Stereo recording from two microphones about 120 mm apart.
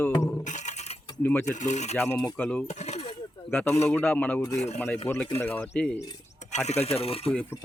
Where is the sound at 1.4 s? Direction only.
90° left.